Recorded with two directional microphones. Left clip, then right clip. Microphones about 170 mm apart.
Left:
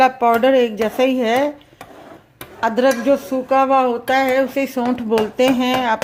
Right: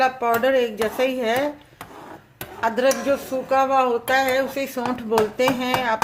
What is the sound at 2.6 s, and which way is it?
Speech, 35° left (ahead or behind).